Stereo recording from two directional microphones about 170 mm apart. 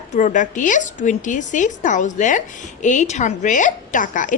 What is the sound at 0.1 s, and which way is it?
A woman's voice, 50° left (ahead or behind).